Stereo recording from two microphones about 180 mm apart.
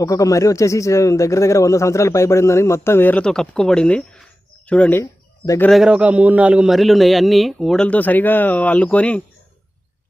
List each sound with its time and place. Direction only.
0.0 s speech: 20° left (ahead or behind)
5.7 s a man's voice: 5° right (ahead or behind)